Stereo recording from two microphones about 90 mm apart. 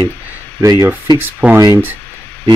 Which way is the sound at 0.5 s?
40° right (ahead or behind).